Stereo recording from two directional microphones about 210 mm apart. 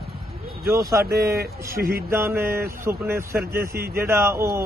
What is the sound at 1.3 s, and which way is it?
Speech, 45° right (ahead or behind).